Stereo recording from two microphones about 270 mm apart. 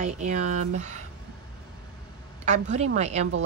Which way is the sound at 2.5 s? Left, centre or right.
Right.